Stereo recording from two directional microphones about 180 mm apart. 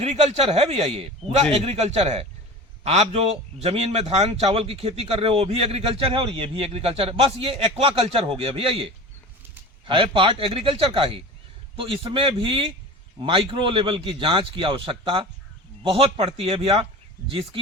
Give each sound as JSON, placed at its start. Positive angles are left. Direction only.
{"t": 0.0, "sound": "a man's voice", "side_deg": -35}